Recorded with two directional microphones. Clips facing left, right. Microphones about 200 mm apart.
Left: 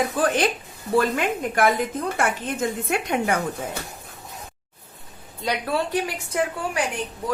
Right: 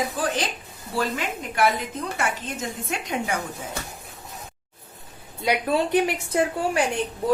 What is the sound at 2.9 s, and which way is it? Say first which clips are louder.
Speech: left 3 dB; 55° left (ahead or behind).